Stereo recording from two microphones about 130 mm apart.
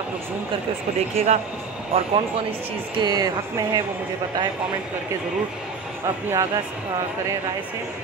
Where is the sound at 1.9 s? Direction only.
50° right (ahead or behind).